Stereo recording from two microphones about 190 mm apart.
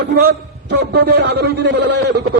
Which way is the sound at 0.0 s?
60° right (ahead or behind).